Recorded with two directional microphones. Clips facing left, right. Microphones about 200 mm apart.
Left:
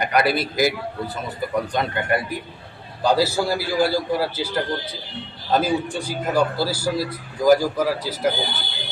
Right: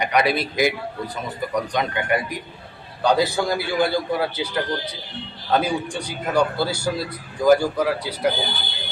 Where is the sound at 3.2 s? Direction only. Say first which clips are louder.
Even; 5° left (ahead or behind).